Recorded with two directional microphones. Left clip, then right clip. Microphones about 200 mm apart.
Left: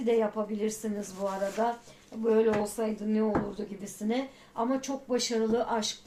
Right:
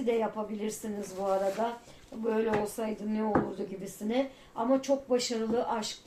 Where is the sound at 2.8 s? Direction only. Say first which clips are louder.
Left 3 dB; 40° left (ahead or behind).